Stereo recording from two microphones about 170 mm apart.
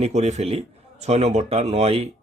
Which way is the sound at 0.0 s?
40° right (ahead or behind).